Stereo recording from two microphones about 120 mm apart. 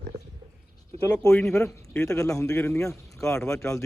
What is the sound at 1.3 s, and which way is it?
Speech, 5° left (ahead or behind).